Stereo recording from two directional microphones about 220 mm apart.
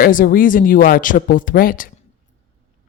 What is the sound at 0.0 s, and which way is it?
Speech, 40° left (ahead or behind).